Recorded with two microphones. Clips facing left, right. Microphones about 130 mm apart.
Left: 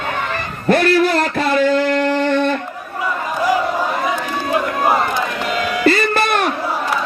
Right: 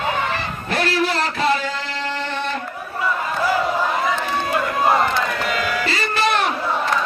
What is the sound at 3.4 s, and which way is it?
Crowd, 15° left (ahead or behind).